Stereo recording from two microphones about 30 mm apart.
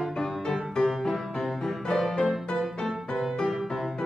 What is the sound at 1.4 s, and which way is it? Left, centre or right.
Music, centre.